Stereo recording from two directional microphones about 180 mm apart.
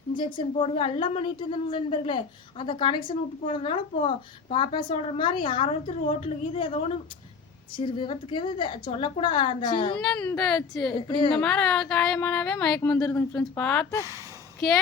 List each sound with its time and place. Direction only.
0.3 s a woman's voice: 30° left (ahead or behind)
10.0 s speech: 5° left (ahead or behind)
11.1 s a woman's voice: 30° left (ahead or behind)
11.3 s speech: 5° left (ahead or behind)